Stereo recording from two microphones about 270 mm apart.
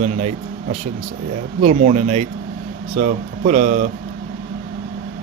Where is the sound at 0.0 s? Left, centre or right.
Right.